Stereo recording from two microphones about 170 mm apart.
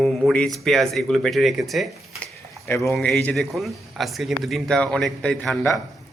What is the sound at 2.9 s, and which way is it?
Speech, 5° left (ahead or behind).